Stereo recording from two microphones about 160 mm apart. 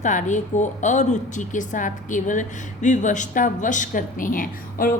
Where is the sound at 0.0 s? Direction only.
50° left (ahead or behind).